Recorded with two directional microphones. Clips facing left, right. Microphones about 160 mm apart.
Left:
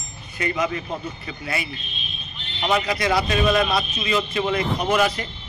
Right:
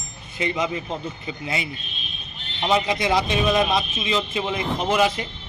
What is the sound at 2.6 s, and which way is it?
A man's voice, 25° right (ahead or behind).